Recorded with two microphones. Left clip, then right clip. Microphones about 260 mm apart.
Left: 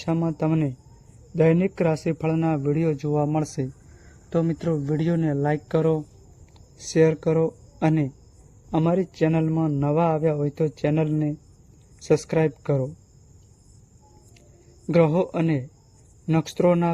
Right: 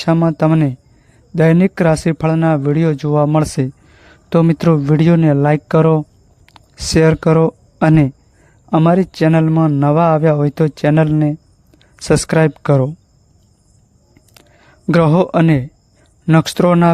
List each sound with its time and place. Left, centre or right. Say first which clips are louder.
0.0 s a man's voice: right 11 dB; right
14.8 s a man's voice: right 7 dB; right